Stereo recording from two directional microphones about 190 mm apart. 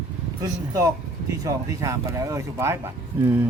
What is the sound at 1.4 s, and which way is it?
Speech, 15° right (ahead or behind).